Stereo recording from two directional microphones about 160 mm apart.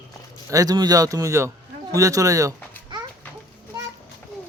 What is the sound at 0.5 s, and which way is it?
Speech, 25° right (ahead or behind).